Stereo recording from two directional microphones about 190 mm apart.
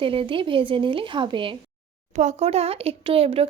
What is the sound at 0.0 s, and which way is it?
A woman's voice, 25° right (ahead or behind).